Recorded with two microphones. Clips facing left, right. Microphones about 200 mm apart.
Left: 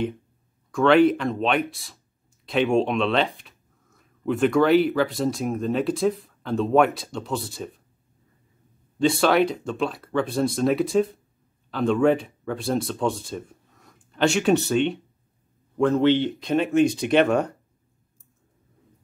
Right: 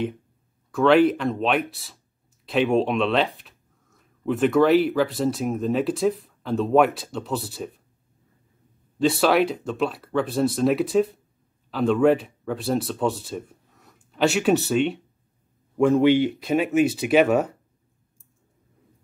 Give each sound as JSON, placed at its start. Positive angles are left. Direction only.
{"t": 0.7, "sound": "speech", "side_deg": -5}
{"t": 9.0, "sound": "speech", "side_deg": -5}